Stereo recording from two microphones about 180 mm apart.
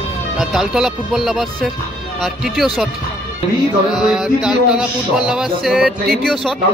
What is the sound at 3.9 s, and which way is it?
Speech, centre (ahead or behind).